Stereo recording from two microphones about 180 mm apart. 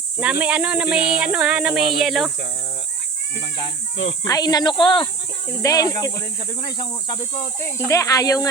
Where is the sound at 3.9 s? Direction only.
90° left.